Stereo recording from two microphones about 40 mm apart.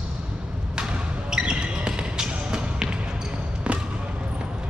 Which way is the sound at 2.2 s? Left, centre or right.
Right.